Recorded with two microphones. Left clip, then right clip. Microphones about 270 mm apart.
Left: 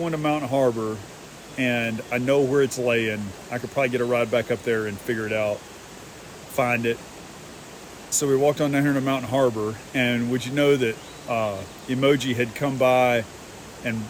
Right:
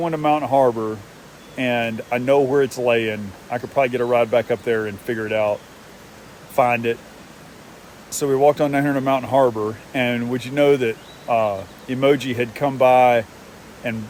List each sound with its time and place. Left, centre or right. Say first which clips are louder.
0.0 s speech: right 6 dB; centre
6.6 s speech: right 5 dB; centre
8.1 s speech: right 4 dB; centre